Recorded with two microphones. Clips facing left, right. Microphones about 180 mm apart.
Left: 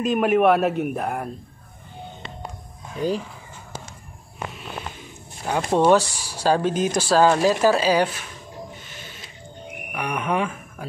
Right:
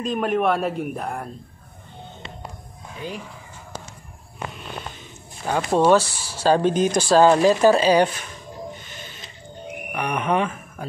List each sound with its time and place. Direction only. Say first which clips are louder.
0.0 s a man's voice: left 4 dB; 5° left (ahead or behind)
3.0 s speech: left 9 dB; 40° left (ahead or behind)
5.9 s a man's voice: even; 15° left (ahead or behind)
9.9 s speech: right 2 dB; 5° left (ahead or behind)